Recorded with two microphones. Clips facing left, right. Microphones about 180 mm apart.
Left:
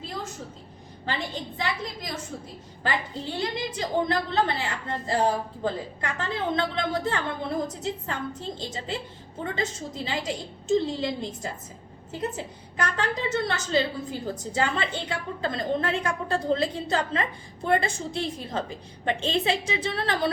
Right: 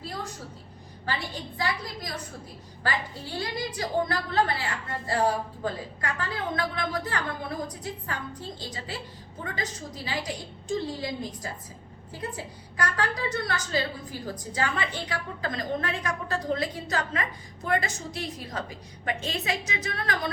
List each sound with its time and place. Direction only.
1.5 s a woman's voice: 20° left (ahead or behind)
3.3 s a woman's voice: 25° left (ahead or behind)
12.7 s a woman's voice: 25° left (ahead or behind)